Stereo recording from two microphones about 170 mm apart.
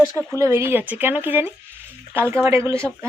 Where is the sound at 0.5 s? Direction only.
15° right (ahead or behind).